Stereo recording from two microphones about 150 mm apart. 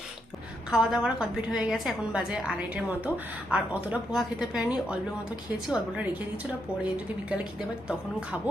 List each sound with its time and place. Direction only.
0.7 s a woman's voice: centre (ahead or behind)